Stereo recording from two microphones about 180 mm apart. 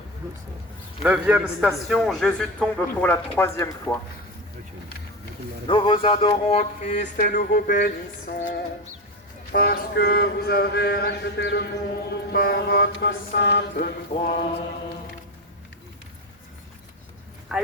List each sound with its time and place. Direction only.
1.0 s a man's voice: 5° right (ahead or behind); by 3.8 s 15° left (ahead or behind)
5.6 s a sound: 30° left (ahead or behind)
7.0 s music: 50° left (ahead or behind)
9.5 s mantra: 60° left (ahead or behind)
14.1 s music: 45° left (ahead or behind)
17.5 s speech: centre (ahead or behind)